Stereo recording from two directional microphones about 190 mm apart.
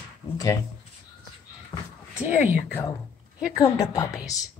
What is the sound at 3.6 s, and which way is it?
Speech, 15° left (ahead or behind).